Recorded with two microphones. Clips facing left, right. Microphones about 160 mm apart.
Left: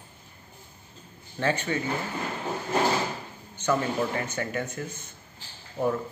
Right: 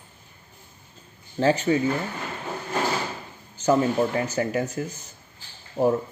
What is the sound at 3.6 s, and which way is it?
Speech, 35° right (ahead or behind).